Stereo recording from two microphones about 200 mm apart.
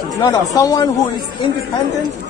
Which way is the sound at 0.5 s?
15° left (ahead or behind).